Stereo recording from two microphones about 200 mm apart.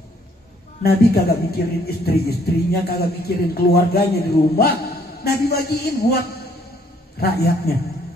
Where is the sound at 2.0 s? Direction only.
50° left (ahead or behind).